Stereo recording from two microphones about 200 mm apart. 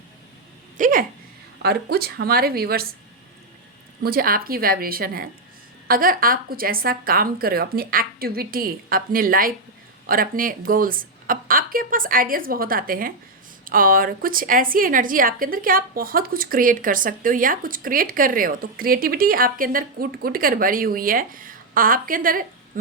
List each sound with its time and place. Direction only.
0.8 s a woman's voice: 45° right (ahead or behind)
4.0 s a woman's voice: 45° right (ahead or behind)